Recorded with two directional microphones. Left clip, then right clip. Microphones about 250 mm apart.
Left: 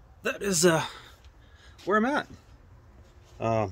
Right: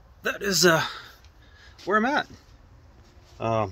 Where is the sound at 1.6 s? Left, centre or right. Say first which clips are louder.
Right 2 dB; centre.